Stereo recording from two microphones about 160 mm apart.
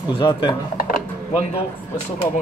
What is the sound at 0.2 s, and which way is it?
Speech, 30° left (ahead or behind).